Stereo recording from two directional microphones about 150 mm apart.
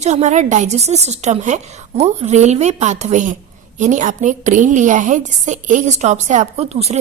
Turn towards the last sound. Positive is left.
turn(degrees=-45)  # may be behind; listen again after turning